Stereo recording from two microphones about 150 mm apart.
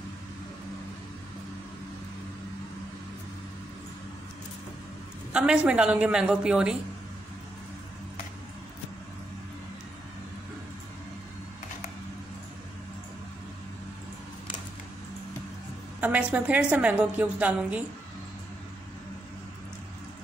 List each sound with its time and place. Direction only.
5.3 s a woman's voice: 5° right (ahead or behind)
16.0 s a woman's voice: 10° right (ahead or behind)